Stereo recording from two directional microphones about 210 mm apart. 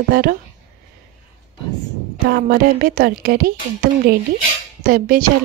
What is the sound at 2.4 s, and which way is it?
A woman's voice, 45° right (ahead or behind).